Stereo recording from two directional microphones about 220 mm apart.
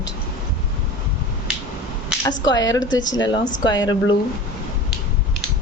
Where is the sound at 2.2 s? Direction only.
15° left (ahead or behind).